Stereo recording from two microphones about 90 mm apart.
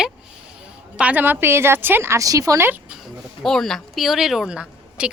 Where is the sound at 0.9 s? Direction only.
15° right (ahead or behind); by 2.6 s 40° right (ahead or behind).